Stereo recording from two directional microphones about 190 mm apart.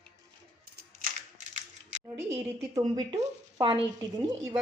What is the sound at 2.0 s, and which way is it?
A woman's voice, 15° right (ahead or behind).